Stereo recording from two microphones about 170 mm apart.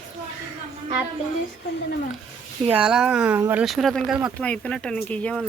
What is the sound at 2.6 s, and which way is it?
Speech, 5° right (ahead or behind).